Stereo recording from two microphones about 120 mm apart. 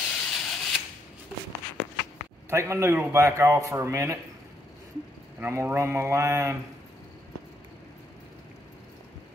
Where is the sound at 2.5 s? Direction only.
25° right (ahead or behind).